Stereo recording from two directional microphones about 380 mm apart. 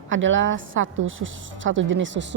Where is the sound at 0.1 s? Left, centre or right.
Right.